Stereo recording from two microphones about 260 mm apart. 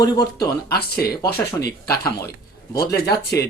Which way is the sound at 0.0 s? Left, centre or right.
Centre.